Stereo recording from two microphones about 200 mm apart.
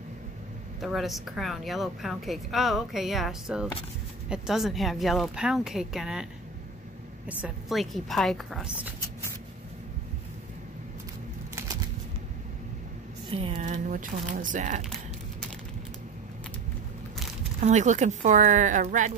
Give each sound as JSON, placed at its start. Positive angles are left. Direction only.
{"t": 0.7, "sound": "speech", "side_deg": 0}
{"t": 7.2, "sound": "speech", "side_deg": -5}
{"t": 11.5, "sound": "a sound", "side_deg": -15}
{"t": 13.3, "sound": "speech", "side_deg": -30}
{"t": 17.6, "sound": "speech", "side_deg": -35}